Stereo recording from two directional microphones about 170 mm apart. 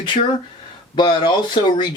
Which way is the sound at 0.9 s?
25° left (ahead or behind).